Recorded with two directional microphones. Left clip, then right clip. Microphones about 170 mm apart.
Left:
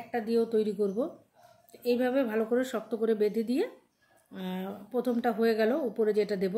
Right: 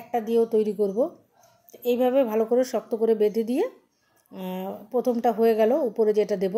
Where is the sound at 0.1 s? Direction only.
15° right (ahead or behind).